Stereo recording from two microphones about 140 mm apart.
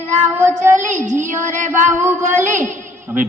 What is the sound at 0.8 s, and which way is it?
Child singing, 60° right (ahead or behind).